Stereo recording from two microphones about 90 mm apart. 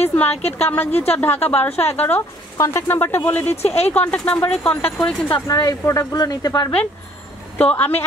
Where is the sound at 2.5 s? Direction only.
35° left (ahead or behind); by 4.2 s 15° left (ahead or behind).